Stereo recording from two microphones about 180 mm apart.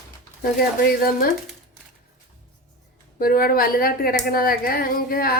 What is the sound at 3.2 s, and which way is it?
Speech, 55° left (ahead or behind).